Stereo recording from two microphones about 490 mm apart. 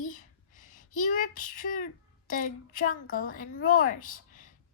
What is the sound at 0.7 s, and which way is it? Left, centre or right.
Speech, centre.